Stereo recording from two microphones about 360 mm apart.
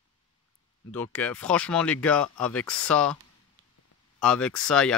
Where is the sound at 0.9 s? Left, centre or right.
Centre.